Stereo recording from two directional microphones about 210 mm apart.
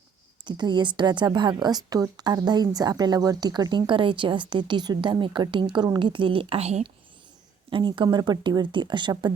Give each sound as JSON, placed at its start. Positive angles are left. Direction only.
{"t": 0.4, "sound": "a woman's voice", "side_deg": -20}